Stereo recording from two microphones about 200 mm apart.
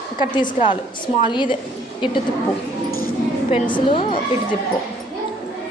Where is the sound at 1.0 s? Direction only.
25° left (ahead or behind).